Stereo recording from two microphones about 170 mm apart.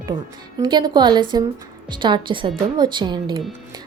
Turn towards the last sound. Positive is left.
turn(degrees=-25)  # may be behind; listen again after turning